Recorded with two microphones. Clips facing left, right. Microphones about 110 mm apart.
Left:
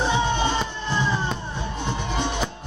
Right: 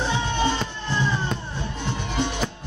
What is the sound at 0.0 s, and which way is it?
Music, 20° left (ahead or behind).